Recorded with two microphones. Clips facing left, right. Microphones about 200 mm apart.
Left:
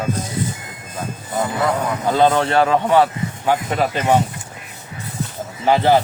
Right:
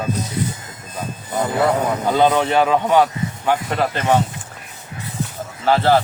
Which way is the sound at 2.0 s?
5° right (ahead or behind).